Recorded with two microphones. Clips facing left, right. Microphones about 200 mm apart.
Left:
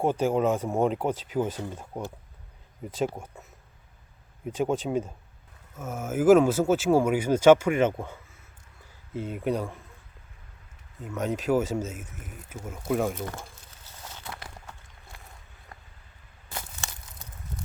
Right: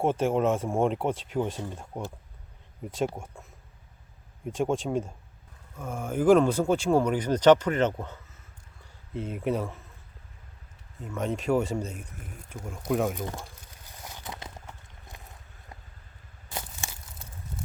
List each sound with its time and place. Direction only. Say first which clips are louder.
0.0 s speech: left 1 dB; centre (ahead or behind)
4.4 s speech: left 1 dB; centre (ahead or behind)
11.0 s speech: left 1 dB; centre (ahead or behind)
13.1 s speech: even; 15° right (ahead or behind)
14.0 s a sound: right 1 dB; 15° right (ahead or behind)